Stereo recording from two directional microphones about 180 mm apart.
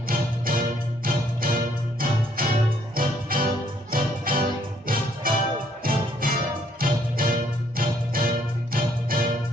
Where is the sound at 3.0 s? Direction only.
50° right (ahead or behind).